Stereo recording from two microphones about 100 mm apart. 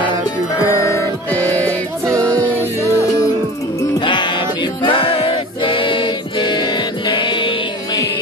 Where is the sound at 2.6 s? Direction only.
25° left (ahead or behind).